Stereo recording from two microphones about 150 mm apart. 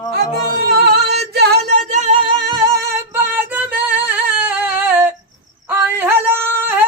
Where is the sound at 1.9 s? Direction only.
50° right (ahead or behind).